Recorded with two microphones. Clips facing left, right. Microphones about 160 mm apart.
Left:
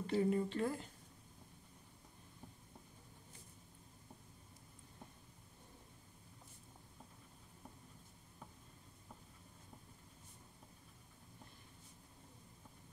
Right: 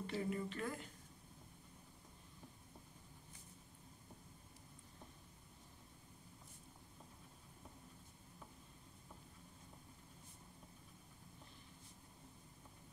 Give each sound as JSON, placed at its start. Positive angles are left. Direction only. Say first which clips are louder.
{"t": 0.0, "sound": "speech", "louder": "left 7 dB", "side_deg": 35}